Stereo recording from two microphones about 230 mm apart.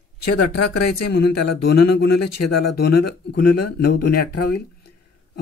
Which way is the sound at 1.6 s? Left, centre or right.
Left.